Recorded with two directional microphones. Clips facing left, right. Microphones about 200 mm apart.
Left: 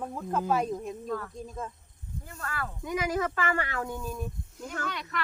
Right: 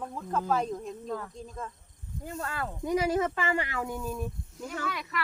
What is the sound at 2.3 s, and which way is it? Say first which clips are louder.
Speech: right 3 dB; 20° right (ahead or behind).